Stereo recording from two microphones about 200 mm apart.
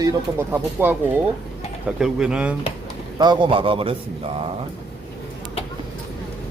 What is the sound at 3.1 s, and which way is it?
Speech, 20° right (ahead or behind).